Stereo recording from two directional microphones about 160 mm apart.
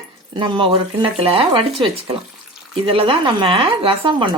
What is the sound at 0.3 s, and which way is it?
Speech, 30° right (ahead or behind).